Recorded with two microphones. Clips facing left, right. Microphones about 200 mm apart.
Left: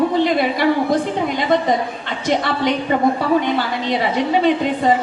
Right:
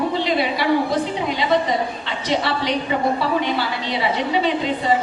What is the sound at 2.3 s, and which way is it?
Speech, 50° left (ahead or behind).